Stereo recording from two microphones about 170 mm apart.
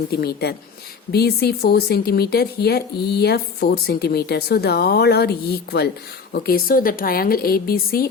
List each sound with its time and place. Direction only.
0.1 s speech: 70° left (ahead or behind)
6.4 s a woman's voice: 60° left (ahead or behind)